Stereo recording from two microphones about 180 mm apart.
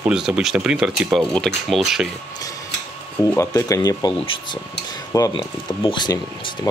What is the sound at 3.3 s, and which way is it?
Speech, 15° left (ahead or behind).